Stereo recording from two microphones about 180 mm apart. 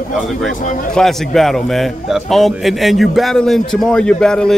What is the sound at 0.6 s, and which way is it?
Speech, 45° left (ahead or behind).